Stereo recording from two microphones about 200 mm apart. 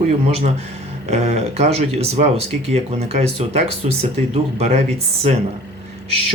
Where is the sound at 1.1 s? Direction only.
35° right (ahead or behind).